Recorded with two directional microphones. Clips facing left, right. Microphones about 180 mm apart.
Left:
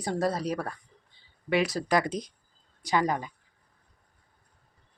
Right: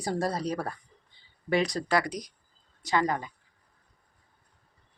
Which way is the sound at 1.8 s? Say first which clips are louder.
Left 1 dB; 20° left (ahead or behind).